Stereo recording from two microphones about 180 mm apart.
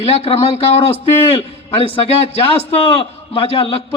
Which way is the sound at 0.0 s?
35° left (ahead or behind).